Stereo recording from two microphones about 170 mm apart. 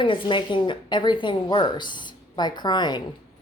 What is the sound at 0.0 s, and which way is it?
Speech, 30° left (ahead or behind).